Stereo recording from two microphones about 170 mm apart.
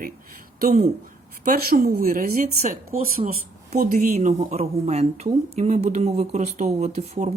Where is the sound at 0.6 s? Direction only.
45° right (ahead or behind).